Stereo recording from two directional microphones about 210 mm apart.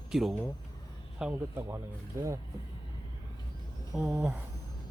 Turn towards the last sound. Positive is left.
turn(degrees=0)  # may be behind; listen again after turning